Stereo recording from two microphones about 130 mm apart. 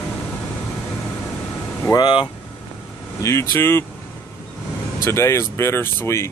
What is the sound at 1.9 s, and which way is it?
Speech, 35° left (ahead or behind).